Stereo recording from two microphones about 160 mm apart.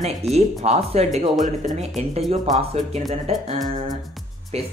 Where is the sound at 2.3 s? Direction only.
45° right (ahead or behind).